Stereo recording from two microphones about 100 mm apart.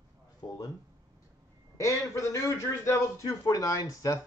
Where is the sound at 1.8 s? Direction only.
30° left (ahead or behind).